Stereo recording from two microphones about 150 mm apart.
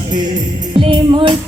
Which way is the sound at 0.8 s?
35° right (ahead or behind).